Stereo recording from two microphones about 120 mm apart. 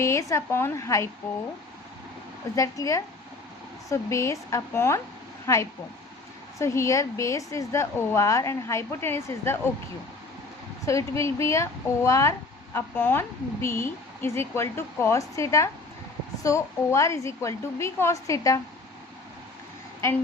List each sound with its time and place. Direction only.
0.0 s speech: 25° left (ahead or behind)
2.6 s speech: 25° left (ahead or behind)
10.8 s speech: 25° left (ahead or behind)